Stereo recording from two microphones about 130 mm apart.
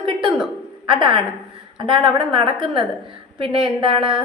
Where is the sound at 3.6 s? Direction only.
40° right (ahead or behind).